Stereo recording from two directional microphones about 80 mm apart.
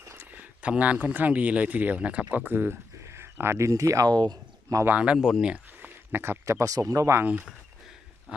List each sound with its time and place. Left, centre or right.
0.2 s speech: right
4.9 s speech: centre
5.1 s speech: centre
5.8 s speech: right